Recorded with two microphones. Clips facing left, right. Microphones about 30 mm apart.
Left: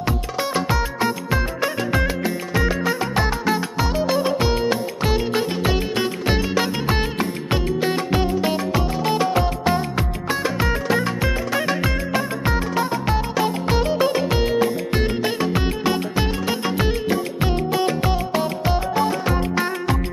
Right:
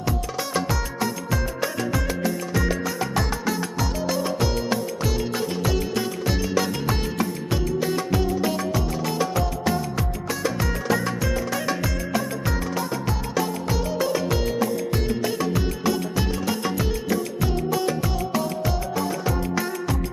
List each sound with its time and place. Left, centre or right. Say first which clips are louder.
0.5 s music: left 3 dB; left